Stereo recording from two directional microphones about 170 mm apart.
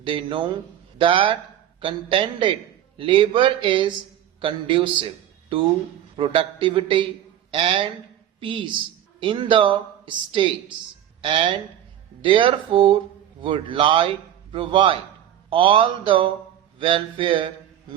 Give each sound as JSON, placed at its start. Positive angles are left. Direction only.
{"t": 0.0, "sound": "speech", "side_deg": -30}